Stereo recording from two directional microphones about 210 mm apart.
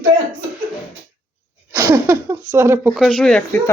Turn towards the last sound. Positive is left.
turn(degrees=5)  # may be behind; listen again after turning